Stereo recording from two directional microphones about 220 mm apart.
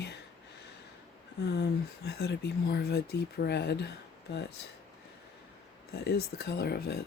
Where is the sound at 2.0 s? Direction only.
50° left (ahead or behind).